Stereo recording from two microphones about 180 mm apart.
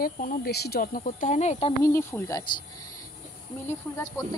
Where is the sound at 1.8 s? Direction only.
15° left (ahead or behind).